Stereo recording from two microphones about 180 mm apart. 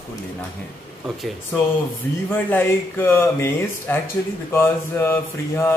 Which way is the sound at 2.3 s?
10° left (ahead or behind).